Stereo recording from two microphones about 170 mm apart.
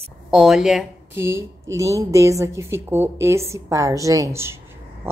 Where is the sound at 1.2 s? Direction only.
15° right (ahead or behind).